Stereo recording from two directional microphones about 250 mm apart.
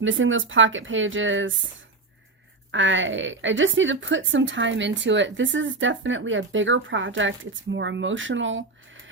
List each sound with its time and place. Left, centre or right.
0.0 s a woman's voice: right
2.7 s a woman's voice: right